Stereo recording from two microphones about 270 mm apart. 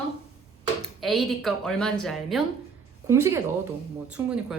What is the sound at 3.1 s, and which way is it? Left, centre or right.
A woman's voice, centre.